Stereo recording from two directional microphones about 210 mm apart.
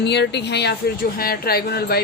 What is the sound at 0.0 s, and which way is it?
Speech, 55° left (ahead or behind).